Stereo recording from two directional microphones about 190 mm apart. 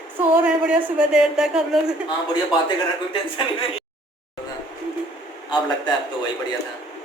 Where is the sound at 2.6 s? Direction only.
25° left (ahead or behind).